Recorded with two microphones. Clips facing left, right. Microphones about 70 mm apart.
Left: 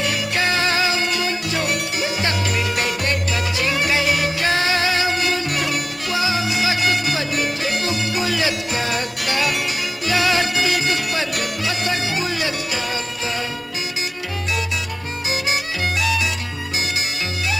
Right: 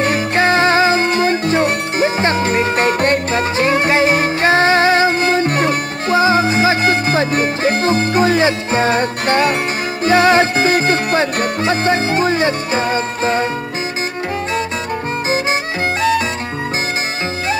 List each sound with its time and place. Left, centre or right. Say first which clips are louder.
0.0 s music: right 7 dB; right